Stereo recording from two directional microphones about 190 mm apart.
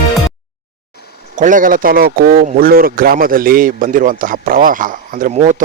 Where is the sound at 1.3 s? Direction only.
40° right (ahead or behind).